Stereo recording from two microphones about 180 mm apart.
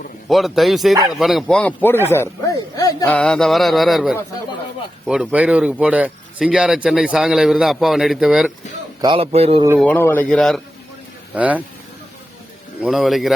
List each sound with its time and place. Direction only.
0.3 s a man's voice: centre (ahead or behind); by 3.1 s 20° left (ahead or behind)
3.1 s a man's voice: 5° left (ahead or behind)
9.0 s a man's voice: 25° right (ahead or behind)
9.7 s speech: 10° left (ahead or behind)
11.3 s speech: 10° right (ahead or behind)
12.8 s a man's voice: centre (ahead or behind)